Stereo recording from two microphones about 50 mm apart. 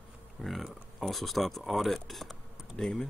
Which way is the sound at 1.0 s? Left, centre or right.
Centre.